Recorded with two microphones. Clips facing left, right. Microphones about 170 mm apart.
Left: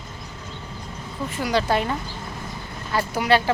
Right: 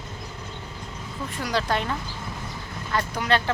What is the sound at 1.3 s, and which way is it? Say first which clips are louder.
A woman's voice: left 4 dB; centre (ahead or behind).